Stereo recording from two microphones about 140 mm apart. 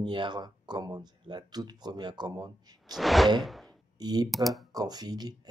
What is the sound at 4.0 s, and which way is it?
Speech, 30° right (ahead or behind).